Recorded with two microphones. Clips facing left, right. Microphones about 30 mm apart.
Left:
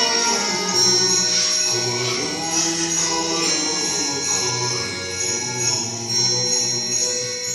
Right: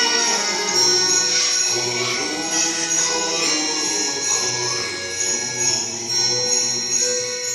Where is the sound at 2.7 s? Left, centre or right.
Centre.